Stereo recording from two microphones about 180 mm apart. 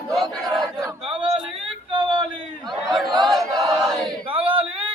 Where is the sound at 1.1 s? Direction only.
30° right (ahead or behind).